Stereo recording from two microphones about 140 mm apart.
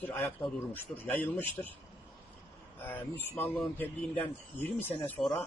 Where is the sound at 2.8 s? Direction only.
15° left (ahead or behind).